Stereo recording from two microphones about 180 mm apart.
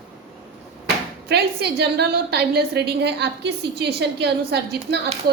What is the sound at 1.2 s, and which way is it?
A woman's voice, 65° right (ahead or behind).